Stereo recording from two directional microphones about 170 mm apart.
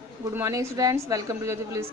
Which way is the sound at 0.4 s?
20° right (ahead or behind).